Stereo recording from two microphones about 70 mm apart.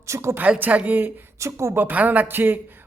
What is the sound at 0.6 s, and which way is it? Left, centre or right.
Speech, right.